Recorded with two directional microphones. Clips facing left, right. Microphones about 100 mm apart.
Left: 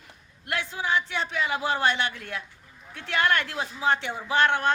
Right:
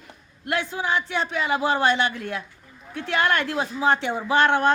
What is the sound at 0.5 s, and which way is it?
Speech, 40° right (ahead or behind).